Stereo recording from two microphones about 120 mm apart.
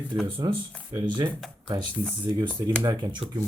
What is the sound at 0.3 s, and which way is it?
Speech, 40° right (ahead or behind).